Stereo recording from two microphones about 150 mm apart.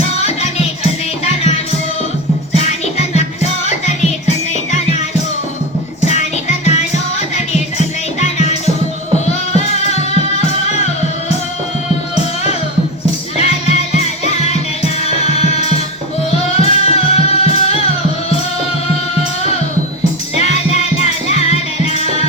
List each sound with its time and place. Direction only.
2.6 s music: 45° left (ahead or behind)
6.7 s music: 50° left (ahead or behind)
13.3 s music: 45° left (ahead or behind)
20.3 s music: 45° left (ahead or behind)